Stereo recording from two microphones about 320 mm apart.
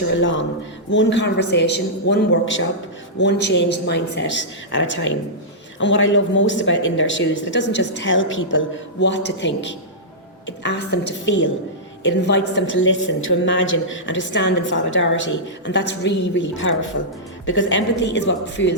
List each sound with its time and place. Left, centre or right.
0.1 s a woman's voice: left